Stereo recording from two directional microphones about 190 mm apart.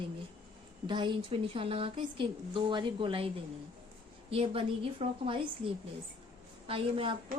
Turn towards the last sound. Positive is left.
turn(degrees=-30)  # may be behind; listen again after turning